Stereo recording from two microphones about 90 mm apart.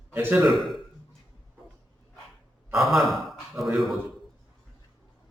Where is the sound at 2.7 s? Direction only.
Centre (ahead or behind).